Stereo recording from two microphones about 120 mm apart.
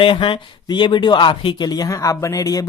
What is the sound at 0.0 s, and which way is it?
Speech, 45° left (ahead or behind).